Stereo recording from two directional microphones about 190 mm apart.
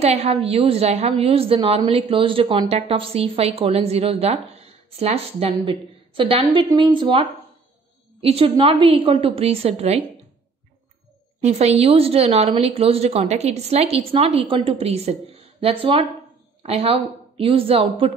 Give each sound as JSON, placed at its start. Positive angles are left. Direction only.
{"t": 0.0, "sound": "a woman's voice", "side_deg": -35}
{"t": 11.4, "sound": "a woman's voice", "side_deg": -35}